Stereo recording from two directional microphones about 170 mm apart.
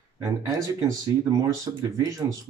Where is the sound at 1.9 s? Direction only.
20° right (ahead or behind).